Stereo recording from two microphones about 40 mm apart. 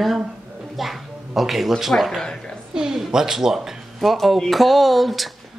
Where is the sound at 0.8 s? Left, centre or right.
Centre.